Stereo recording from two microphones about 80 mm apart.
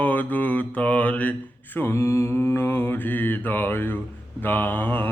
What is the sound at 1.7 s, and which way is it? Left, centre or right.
Mantra, left.